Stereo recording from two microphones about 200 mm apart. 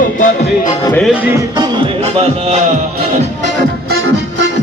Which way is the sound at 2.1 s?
30° right (ahead or behind).